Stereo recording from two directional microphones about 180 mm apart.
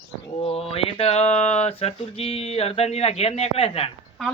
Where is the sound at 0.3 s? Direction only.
30° left (ahead or behind).